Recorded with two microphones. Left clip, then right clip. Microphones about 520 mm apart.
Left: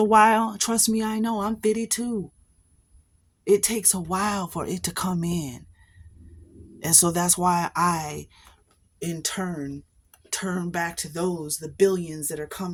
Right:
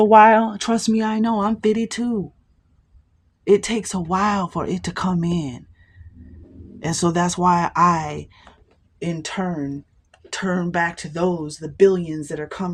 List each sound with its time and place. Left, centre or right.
0.0 s speech: left
3.4 s speech: left
6.7 s speech: left